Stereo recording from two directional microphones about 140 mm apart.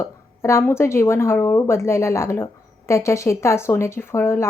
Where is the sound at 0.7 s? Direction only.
20° left (ahead or behind).